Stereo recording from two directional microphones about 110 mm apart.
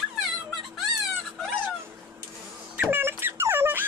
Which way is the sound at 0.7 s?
Centre (ahead or behind).